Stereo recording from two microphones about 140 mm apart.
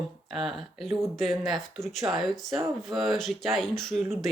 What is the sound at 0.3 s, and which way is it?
Speech, centre (ahead or behind).